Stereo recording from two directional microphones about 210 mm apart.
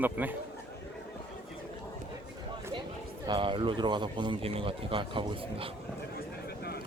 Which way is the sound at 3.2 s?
25° right (ahead or behind).